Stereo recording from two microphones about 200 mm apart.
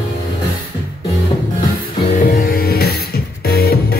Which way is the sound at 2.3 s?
45° left (ahead or behind).